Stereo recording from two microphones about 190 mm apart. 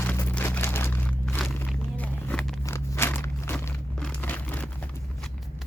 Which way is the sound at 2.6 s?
15° left (ahead or behind).